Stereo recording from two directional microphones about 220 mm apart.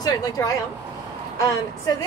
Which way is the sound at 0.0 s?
15° left (ahead or behind).